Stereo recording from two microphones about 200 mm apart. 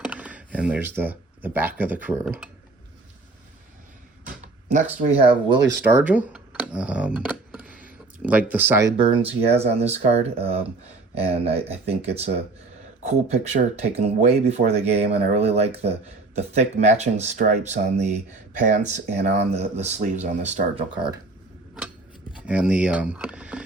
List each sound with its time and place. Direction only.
0.1 s speech: 5° right (ahead or behind)
4.9 s speech: 30° right (ahead or behind)
5.9 s speech: 10° right (ahead or behind)
9.2 s speech: 30° right (ahead or behind)
22.4 s speech: 5° right (ahead or behind)